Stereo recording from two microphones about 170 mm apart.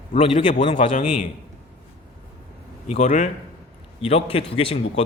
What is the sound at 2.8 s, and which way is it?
Speech, 45° left (ahead or behind).